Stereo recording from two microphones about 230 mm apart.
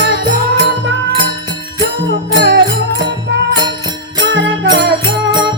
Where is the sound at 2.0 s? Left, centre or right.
Right.